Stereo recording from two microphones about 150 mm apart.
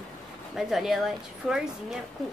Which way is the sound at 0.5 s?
Centre (ahead or behind).